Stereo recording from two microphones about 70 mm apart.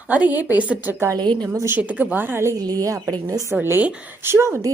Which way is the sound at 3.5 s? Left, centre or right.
Right.